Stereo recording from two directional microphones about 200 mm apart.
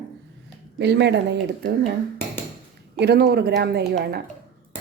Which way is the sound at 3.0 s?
55° right (ahead or behind).